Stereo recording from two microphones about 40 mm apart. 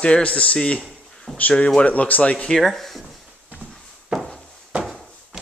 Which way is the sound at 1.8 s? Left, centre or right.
Left.